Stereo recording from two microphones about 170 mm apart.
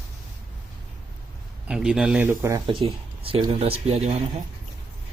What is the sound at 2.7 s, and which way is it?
Speech, 30° right (ahead or behind).